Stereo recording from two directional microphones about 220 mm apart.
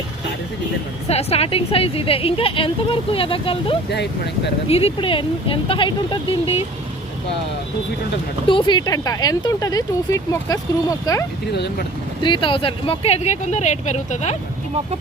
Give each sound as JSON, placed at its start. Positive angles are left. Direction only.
{"t": 1.0, "sound": "speech", "side_deg": 30}
{"t": 3.8, "sound": "speech", "side_deg": 50}
{"t": 4.7, "sound": "speech", "side_deg": 25}
{"t": 8.4, "sound": "speech", "side_deg": 20}
{"t": 11.5, "sound": "speech", "side_deg": 50}
{"t": 12.2, "sound": "speech", "side_deg": 20}